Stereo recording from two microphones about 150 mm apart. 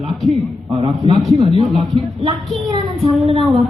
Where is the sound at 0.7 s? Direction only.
40° right (ahead or behind).